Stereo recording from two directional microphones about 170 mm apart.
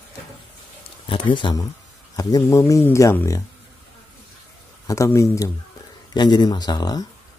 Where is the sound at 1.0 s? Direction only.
30° left (ahead or behind).